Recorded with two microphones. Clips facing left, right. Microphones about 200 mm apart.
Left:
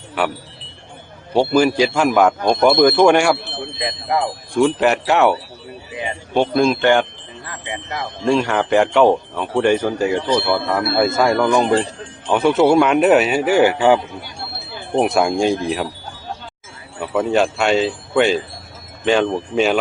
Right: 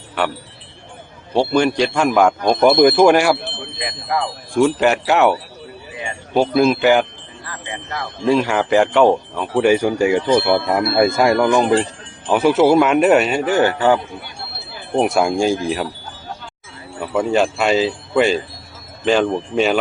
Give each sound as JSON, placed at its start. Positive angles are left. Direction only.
{"t": 0.2, "sound": "speech", "side_deg": 5}
{"t": 2.6, "sound": "speech", "side_deg": -20}
{"t": 2.8, "sound": "speech", "side_deg": -5}
{"t": 3.8, "sound": "speech", "side_deg": 25}
{"t": 4.5, "sound": "speech", "side_deg": 0}
{"t": 7.4, "sound": "speech", "side_deg": 20}
{"t": 8.2, "sound": "speech", "side_deg": 0}
{"t": 12.3, "sound": "speech", "side_deg": -5}
{"t": 14.9, "sound": "speech", "side_deg": 0}
{"t": 17.0, "sound": "speech", "side_deg": 0}